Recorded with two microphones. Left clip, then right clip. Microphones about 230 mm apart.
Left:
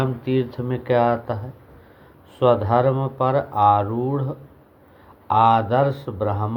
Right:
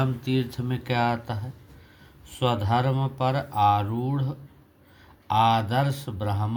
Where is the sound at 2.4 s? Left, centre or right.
Right.